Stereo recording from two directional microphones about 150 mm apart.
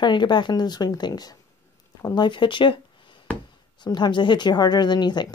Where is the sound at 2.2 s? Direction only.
35° left (ahead or behind).